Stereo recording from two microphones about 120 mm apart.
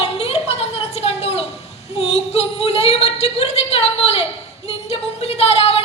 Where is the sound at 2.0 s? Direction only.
60° left (ahead or behind).